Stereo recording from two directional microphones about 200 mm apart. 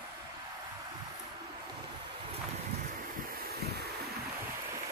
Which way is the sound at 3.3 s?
50° right (ahead or behind).